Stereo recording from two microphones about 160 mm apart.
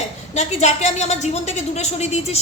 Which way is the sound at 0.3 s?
45° left (ahead or behind).